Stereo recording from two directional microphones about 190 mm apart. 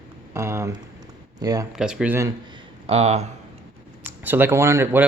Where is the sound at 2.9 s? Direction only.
35° right (ahead or behind).